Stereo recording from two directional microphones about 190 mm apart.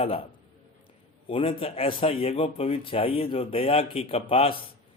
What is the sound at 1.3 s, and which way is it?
A man's voice, 30° left (ahead or behind).